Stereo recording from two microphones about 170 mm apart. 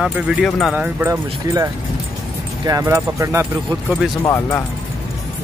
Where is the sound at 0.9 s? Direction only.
15° right (ahead or behind).